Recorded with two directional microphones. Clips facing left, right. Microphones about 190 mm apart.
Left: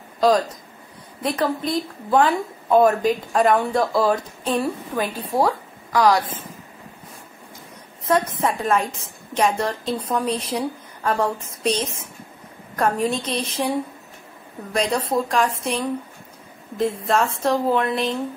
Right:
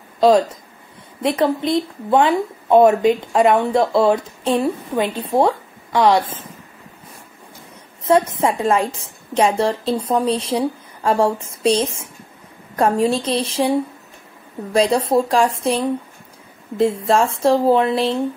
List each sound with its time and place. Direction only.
1.4 s a woman's voice: 25° right (ahead or behind)
8.0 s a woman's voice: 25° right (ahead or behind)